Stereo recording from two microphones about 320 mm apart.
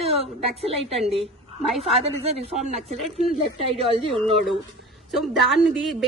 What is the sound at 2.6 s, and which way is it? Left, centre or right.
A woman's voice, centre.